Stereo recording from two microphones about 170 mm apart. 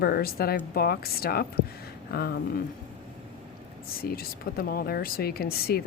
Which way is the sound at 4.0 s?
60° left (ahead or behind).